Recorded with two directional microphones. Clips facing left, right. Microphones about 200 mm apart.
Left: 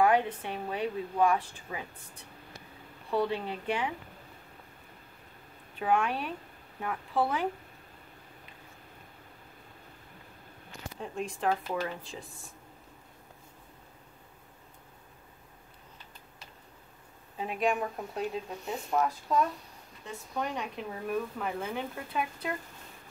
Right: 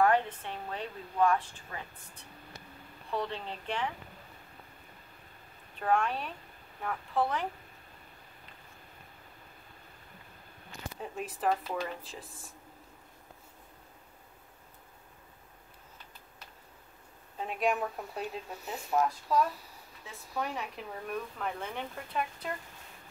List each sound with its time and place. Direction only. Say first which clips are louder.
0.0 s speech: left 1 dB; 10° left (ahead or behind)
3.2 s speech: left 6 dB; 10° left (ahead or behind)
5.8 s speech: left 1 dB; 5° left (ahead or behind)
11.0 s speech: left 3 dB; 5° right (ahead or behind)
17.4 s speech: left 1 dB; centre (ahead or behind)